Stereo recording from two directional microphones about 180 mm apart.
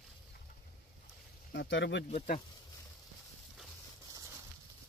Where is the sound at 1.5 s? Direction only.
80° left.